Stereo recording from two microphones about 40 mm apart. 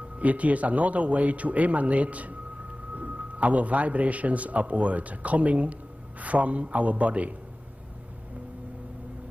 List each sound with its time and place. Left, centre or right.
0.2 s speech: right